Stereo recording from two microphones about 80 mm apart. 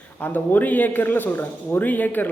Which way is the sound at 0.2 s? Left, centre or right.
Left.